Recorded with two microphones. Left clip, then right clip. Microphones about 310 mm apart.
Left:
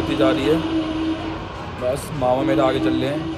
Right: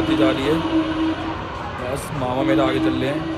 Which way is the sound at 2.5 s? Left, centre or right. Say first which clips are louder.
Even; centre.